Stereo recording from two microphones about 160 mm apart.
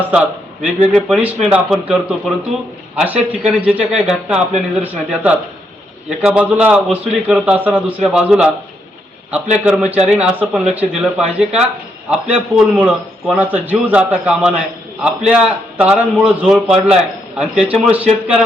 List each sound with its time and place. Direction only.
0.0 s a man's voice: 10° right (ahead or behind)